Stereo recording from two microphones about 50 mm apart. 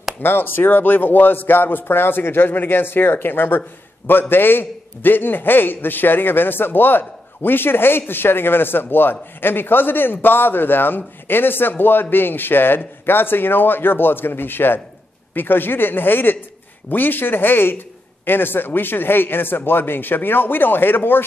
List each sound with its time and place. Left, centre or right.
0.2 s a man's voice: left